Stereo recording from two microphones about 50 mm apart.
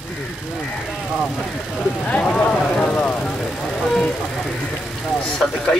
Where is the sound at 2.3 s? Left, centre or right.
Left.